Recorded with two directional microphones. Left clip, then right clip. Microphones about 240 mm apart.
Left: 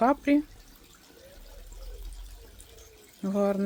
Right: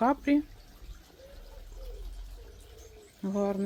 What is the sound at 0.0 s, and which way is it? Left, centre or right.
Speech, centre.